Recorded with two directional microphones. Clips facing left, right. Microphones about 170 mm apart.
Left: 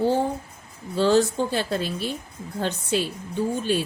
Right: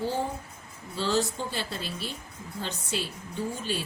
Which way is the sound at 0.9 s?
55° left (ahead or behind).